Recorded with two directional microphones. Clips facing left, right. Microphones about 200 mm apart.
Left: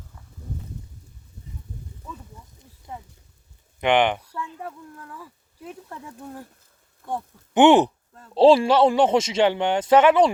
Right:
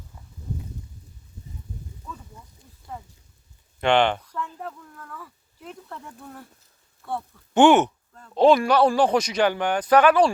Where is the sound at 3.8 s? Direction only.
15° left (ahead or behind).